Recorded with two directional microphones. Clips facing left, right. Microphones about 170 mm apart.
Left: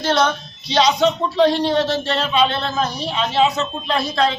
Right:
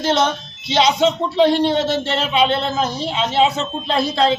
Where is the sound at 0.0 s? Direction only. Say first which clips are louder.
Even; 20° right (ahead or behind).